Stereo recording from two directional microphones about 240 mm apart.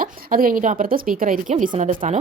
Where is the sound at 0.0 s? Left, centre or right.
Right.